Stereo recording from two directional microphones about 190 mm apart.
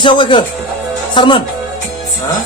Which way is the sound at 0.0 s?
25° left (ahead or behind).